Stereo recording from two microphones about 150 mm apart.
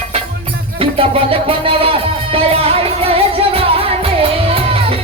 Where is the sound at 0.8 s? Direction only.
40° right (ahead or behind).